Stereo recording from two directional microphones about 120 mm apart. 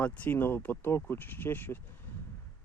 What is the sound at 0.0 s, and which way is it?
Speech, 10° left (ahead or behind).